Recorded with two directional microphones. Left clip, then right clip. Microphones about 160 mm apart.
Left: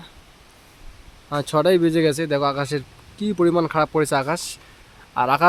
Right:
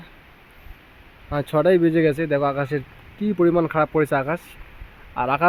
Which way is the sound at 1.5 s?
15° left (ahead or behind).